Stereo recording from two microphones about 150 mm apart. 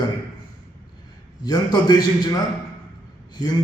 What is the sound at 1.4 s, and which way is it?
A man's voice, 30° left (ahead or behind).